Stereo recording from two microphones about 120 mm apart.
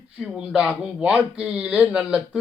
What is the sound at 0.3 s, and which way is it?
Speech, 10° right (ahead or behind).